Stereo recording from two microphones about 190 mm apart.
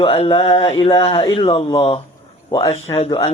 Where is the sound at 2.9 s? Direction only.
30° left (ahead or behind).